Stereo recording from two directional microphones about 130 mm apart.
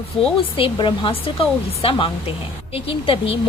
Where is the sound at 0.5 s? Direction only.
40° left (ahead or behind).